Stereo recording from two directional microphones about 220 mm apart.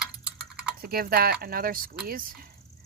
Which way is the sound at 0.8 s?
40° right (ahead or behind).